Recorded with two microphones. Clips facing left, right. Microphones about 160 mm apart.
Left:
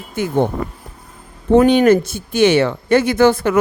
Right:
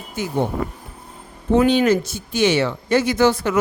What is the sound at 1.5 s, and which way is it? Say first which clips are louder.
Speech: left 5 dB; 55° left (ahead or behind).